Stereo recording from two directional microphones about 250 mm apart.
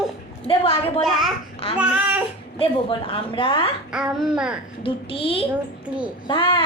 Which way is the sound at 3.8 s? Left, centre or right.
Centre.